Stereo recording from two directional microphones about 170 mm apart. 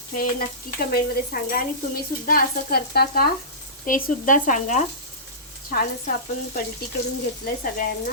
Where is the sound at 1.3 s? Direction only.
65° left (ahead or behind).